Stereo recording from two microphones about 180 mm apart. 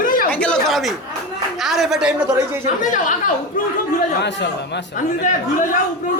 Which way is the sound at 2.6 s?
45° left (ahead or behind).